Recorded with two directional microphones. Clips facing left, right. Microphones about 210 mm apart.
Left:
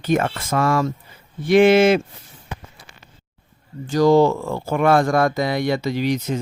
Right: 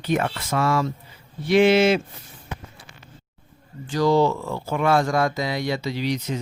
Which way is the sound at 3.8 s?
45° left (ahead or behind).